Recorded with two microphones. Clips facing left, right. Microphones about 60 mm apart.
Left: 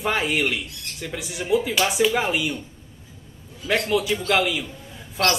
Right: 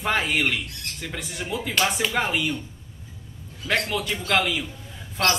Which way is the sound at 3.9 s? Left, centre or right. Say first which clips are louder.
Left 3 dB; centre.